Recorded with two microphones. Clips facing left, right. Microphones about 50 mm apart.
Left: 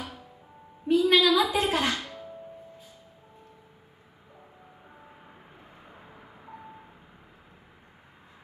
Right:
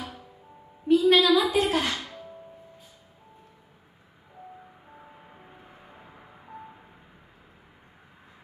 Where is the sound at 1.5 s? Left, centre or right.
Left.